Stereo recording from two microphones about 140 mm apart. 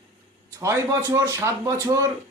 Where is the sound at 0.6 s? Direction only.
20° right (ahead or behind).